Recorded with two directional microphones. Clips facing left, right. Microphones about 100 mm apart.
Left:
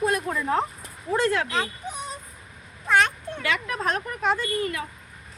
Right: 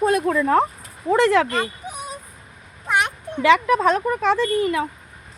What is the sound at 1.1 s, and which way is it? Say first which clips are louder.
Speech: right 7 dB; 90° right.